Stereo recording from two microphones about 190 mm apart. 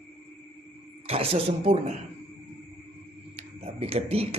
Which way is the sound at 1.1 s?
30° right (ahead or behind).